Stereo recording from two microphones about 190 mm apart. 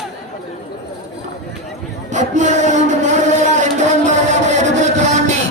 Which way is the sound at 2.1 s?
40° right (ahead or behind).